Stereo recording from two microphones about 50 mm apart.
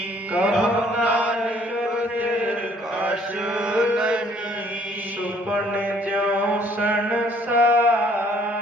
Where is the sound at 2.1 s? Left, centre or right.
Right.